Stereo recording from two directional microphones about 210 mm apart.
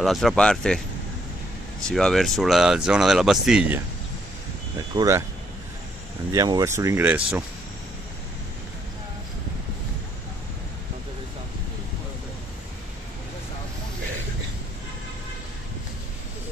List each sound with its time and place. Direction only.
0.0 s speech: centre (ahead or behind)
1.9 s speech: 5° left (ahead or behind)
4.7 s speech: 15° right (ahead or behind)
6.3 s speech: 15° right (ahead or behind)